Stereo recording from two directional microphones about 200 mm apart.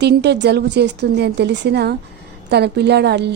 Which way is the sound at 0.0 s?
55° right (ahead or behind).